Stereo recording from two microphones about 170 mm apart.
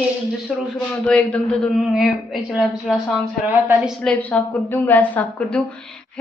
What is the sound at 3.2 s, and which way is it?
Speech, 15° right (ahead or behind).